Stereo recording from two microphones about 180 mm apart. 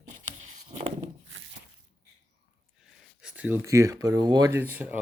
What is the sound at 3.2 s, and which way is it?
Speech, 10° right (ahead or behind).